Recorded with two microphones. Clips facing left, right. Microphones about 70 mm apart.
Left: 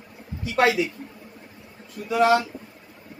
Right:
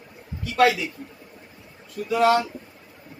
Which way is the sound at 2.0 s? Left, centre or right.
Left.